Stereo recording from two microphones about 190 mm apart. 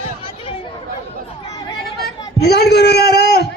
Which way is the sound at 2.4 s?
60° left (ahead or behind).